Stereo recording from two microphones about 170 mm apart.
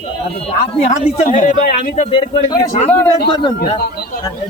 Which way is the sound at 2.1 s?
30° left (ahead or behind).